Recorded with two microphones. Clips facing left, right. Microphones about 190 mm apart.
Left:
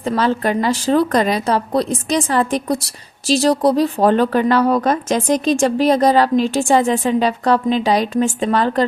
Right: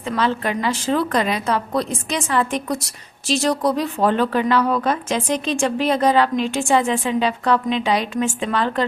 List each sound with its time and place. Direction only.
0.1 s a woman's voice: 40° left (ahead or behind)